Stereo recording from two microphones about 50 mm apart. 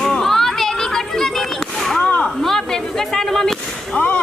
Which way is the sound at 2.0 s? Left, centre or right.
Left.